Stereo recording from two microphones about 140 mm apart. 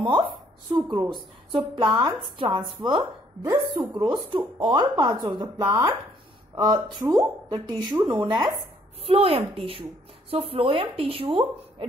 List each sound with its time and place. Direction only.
0.0 s a woman's voice: 35° right (ahead or behind)
1.8 s speech: 30° right (ahead or behind)
9.0 s speech: 45° right (ahead or behind)